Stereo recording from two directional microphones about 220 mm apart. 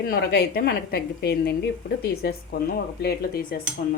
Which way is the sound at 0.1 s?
50° left (ahead or behind).